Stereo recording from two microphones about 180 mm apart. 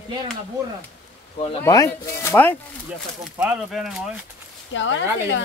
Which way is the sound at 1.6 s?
15° left (ahead or behind).